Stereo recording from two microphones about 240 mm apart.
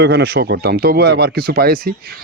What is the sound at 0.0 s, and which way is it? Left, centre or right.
Speech, right.